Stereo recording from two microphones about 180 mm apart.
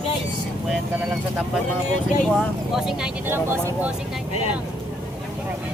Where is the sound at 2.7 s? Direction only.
5° right (ahead or behind).